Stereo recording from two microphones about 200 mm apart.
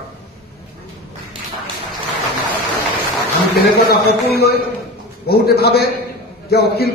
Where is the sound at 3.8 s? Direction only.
50° left (ahead or behind).